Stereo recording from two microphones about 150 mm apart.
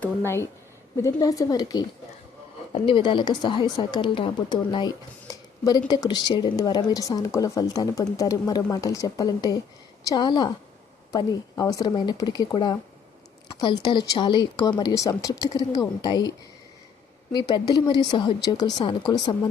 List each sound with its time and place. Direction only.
0.0 s a woman's voice: 15° left (ahead or behind)
2.7 s a woman's voice: 35° left (ahead or behind)
17.3 s a woman's voice: 30° left (ahead or behind)